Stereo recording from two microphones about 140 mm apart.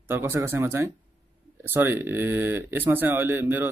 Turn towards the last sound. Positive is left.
turn(degrees=-15)  # may be behind; listen again after turning